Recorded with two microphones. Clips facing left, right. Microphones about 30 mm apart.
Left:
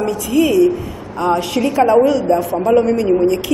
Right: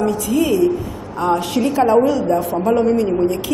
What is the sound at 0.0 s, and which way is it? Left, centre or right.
A woman's voice, left.